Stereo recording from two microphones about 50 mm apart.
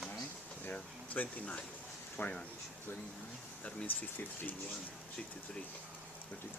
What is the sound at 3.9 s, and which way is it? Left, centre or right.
Speech, left.